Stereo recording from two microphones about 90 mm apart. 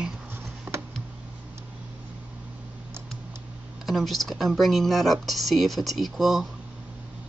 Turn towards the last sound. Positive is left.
turn(degrees=0)  # may be behind; listen again after turning